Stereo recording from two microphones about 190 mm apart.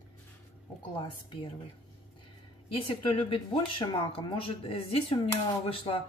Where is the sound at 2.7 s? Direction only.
25° left (ahead or behind).